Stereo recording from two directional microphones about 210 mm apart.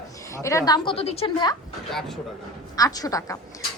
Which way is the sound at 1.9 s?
Centre (ahead or behind).